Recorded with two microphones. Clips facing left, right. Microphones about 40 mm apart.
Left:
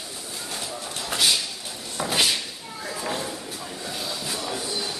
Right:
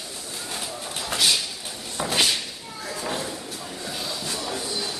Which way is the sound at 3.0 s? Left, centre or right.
Centre.